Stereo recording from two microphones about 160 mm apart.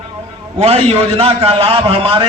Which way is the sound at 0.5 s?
40° right (ahead or behind).